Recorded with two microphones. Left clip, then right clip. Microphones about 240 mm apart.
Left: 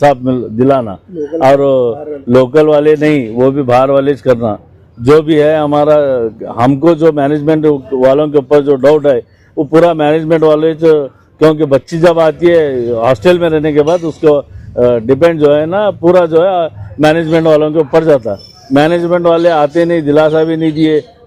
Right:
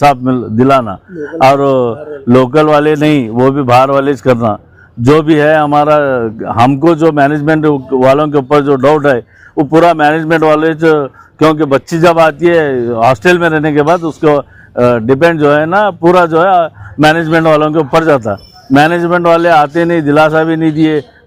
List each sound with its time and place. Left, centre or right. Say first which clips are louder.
0.0 s a man's voice: right 1 dB; right